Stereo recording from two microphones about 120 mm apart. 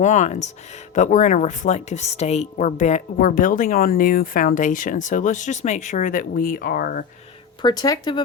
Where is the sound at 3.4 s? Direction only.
90° left.